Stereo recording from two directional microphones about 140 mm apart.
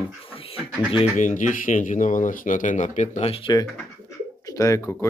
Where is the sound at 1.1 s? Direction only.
65° left (ahead or behind); by 3.6 s 35° left (ahead or behind).